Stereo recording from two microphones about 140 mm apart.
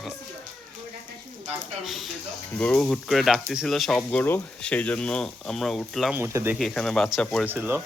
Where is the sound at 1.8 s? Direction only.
Centre (ahead or behind).